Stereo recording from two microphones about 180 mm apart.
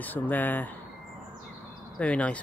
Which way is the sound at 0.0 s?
10° left (ahead or behind).